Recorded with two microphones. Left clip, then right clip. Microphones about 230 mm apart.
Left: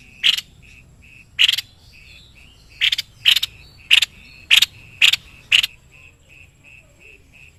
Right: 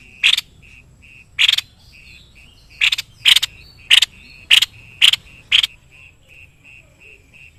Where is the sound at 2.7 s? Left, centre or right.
Right.